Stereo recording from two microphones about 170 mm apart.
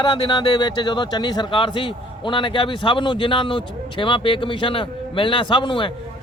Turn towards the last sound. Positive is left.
turn(degrees=30)  # may be behind; listen again after turning